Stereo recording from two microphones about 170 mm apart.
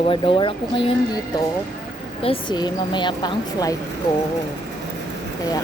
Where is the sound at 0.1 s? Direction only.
30° left (ahead or behind).